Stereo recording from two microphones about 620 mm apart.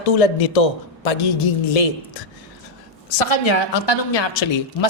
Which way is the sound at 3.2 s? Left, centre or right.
Left.